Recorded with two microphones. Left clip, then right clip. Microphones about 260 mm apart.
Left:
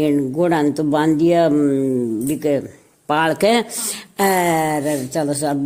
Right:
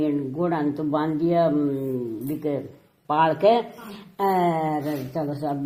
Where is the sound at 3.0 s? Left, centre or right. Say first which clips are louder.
Left 2 dB; left.